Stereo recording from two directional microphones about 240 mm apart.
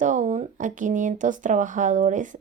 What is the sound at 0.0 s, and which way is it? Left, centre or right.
Speech, right.